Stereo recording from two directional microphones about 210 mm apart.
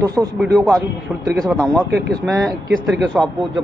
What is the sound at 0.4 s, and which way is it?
A man's voice, centre (ahead or behind).